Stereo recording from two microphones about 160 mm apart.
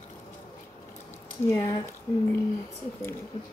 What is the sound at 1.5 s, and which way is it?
Speech, 15° left (ahead or behind).